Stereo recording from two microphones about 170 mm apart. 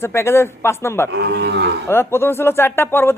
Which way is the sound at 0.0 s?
15° left (ahead or behind).